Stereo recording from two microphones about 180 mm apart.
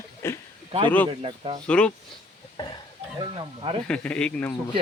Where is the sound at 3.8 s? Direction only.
5° left (ahead or behind).